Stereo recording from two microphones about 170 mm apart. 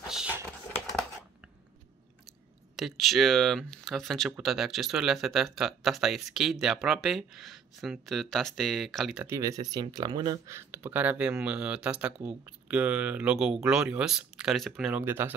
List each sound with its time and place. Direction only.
0.0 s computer keyboard: 5° right (ahead or behind)
2.7 s speech: centre (ahead or behind)
9.3 s speech: 20° right (ahead or behind)
10.5 s speech: 15° right (ahead or behind)